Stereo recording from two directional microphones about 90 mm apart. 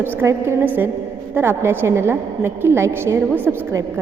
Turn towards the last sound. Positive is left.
turn(degrees=-25)  # may be behind; listen again after turning